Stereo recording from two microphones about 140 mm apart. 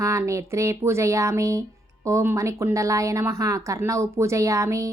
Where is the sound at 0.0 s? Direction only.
20° right (ahead or behind).